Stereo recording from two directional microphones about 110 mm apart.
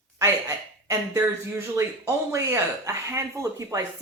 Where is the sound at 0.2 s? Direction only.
30° right (ahead or behind).